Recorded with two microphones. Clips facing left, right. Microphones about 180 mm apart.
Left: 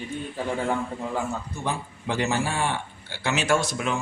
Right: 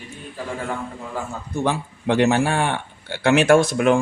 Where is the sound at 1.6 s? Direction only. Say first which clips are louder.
Right 7 dB; 70° right (ahead or behind).